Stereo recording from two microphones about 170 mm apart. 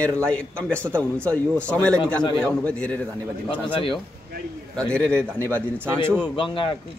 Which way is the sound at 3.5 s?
30° left (ahead or behind).